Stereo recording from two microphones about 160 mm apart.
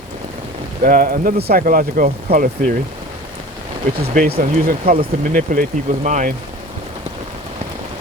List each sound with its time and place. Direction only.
0.8 s speech: 65° right (ahead or behind)
3.9 s speech: 65° right (ahead or behind)